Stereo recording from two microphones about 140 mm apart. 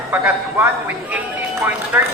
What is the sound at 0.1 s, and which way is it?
A man's voice, 15° right (ahead or behind).